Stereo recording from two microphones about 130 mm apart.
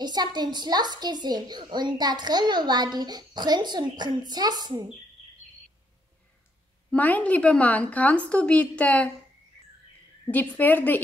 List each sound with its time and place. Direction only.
0.0 s a woman's voice: 35° right (ahead or behind)
6.9 s a woman's voice: 10° left (ahead or behind)
10.2 s a woman's voice: 10° left (ahead or behind)